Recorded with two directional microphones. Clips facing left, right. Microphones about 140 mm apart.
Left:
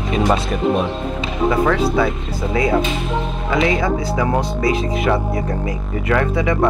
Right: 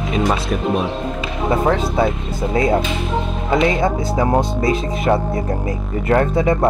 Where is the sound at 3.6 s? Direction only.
25° right (ahead or behind).